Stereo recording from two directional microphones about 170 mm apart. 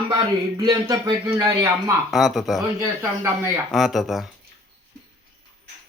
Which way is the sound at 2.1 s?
Centre (ahead or behind).